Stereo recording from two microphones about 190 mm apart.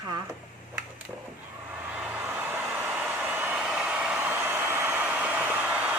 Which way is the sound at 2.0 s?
10° right (ahead or behind).